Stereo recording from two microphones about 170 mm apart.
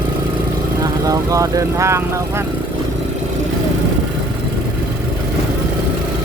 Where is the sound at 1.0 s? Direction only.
20° right (ahead or behind).